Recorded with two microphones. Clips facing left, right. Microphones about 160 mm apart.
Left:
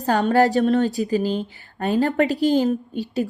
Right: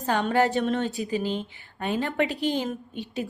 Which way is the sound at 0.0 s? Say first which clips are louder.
Left 5 dB; 40° left (ahead or behind).